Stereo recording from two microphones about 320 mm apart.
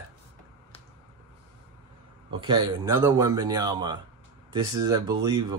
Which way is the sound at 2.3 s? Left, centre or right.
Centre.